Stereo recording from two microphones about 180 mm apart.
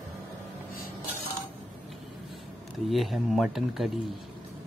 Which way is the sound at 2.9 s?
Centre (ahead or behind).